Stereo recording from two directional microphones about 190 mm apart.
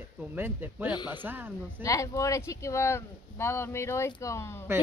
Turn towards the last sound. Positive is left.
turn(degrees=15)  # may be behind; listen again after turning